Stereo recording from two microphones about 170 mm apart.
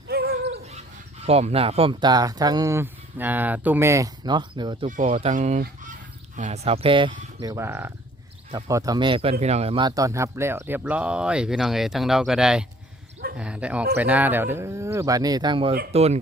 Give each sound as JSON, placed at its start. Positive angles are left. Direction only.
{"t": 0.1, "sound": "a sound", "side_deg": -65}
{"t": 1.3, "sound": "speech", "side_deg": -35}
{"t": 4.9, "sound": "speech", "side_deg": -50}